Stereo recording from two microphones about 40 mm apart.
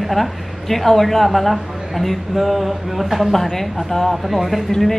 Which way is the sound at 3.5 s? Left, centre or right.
Centre.